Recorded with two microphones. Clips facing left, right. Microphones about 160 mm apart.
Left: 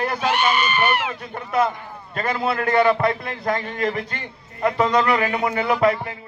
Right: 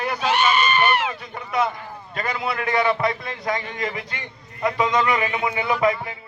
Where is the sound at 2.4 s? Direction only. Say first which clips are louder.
Left 4 dB; 45° left (ahead or behind).